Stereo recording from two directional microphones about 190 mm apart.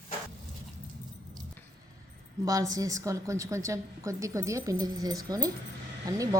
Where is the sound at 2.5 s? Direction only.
20° right (ahead or behind).